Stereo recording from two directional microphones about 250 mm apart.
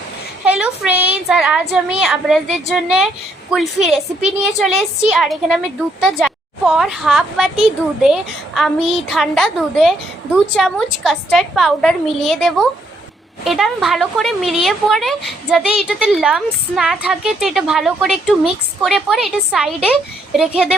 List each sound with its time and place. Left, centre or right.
0.4 s speech: centre